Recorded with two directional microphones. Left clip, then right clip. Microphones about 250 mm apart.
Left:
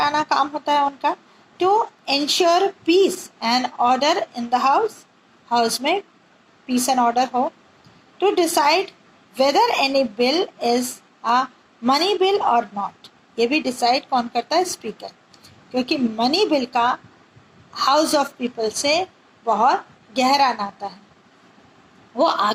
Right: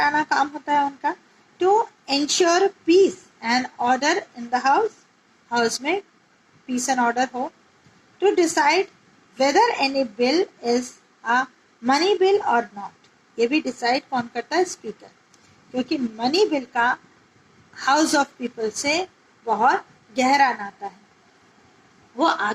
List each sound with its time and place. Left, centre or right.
0.0 s a woman's voice: left
22.1 s speech: centre